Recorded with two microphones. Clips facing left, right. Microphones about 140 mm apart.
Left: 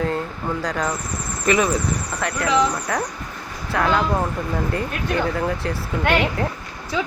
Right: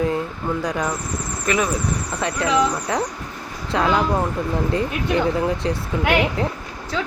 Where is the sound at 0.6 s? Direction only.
10° right (ahead or behind).